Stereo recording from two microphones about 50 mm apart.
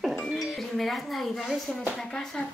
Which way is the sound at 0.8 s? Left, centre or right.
Centre.